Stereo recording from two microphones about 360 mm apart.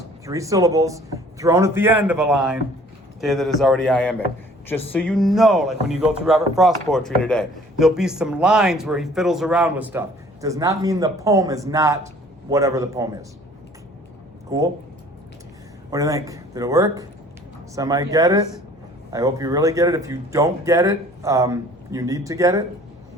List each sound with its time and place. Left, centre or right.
0.3 s speech: centre
14.5 s speech: centre
15.9 s speech: centre